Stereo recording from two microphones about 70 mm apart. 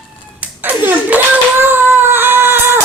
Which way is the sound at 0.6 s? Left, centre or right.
Right.